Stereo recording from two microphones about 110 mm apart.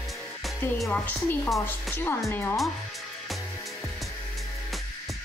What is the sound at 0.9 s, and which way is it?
A woman's voice, 15° left (ahead or behind).